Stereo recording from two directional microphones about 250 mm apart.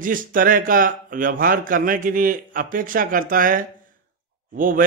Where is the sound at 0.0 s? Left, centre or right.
Right.